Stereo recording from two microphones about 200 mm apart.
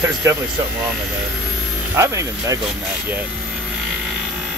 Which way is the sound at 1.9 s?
15° right (ahead or behind).